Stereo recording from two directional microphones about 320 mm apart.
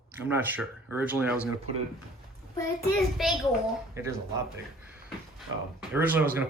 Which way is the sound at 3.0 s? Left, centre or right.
Centre.